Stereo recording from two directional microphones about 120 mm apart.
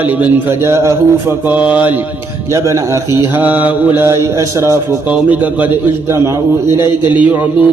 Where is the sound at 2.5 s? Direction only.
25° right (ahead or behind).